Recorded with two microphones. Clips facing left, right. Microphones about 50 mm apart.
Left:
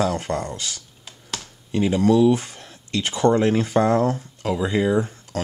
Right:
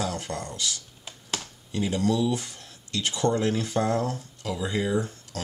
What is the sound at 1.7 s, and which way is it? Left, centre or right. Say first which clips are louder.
Speech: left 8 dB; left.